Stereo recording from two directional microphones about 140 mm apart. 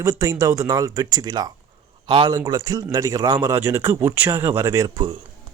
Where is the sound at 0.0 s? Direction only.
25° right (ahead or behind).